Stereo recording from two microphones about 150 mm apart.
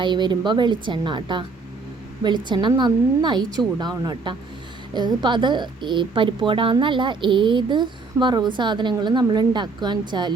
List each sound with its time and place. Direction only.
0.0 s a woman's voice: 30° right (ahead or behind)